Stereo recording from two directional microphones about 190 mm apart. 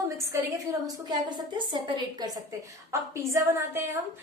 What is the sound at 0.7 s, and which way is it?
A woman's voice, 20° right (ahead or behind).